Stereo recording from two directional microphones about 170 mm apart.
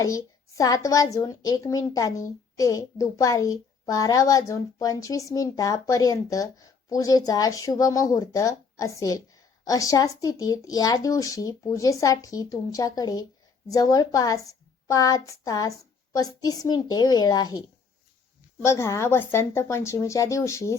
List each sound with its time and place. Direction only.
0.0 s a woman's voice: 20° left (ahead or behind)
14.8 s a sound: 20° left (ahead or behind)
15.4 s a woman's voice: 20° left (ahead or behind)